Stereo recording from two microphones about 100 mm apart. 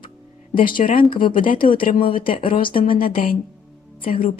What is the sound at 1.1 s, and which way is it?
A woman's voice, 60° left (ahead or behind).